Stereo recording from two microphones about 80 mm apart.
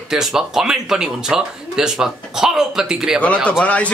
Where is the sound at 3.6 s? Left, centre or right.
Centre.